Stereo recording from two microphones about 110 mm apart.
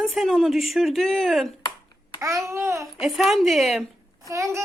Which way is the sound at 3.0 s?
5° right (ahead or behind).